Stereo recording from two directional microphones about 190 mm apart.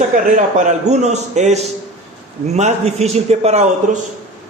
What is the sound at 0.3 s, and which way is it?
A man's voice, 40° right (ahead or behind).